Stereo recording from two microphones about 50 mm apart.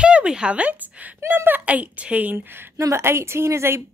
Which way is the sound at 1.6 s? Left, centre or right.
Right.